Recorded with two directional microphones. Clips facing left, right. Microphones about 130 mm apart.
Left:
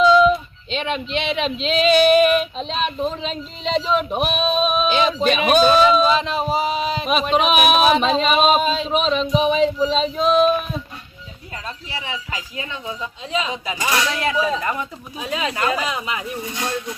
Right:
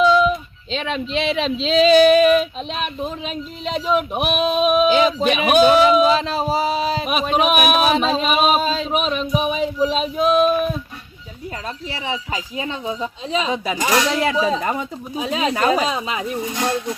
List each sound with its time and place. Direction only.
0.0 s a sound: 5° right (ahead or behind)
0.7 s speech: 35° right (ahead or behind)
2.6 s speech: 10° right (ahead or behind)
6.1 s speech: 35° right (ahead or behind)
7.0 s speech: 10° right (ahead or behind)
8.6 s speech: 40° right (ahead or behind)
8.9 s speech: 10° right (ahead or behind)
12.0 s speech: 30° right (ahead or behind)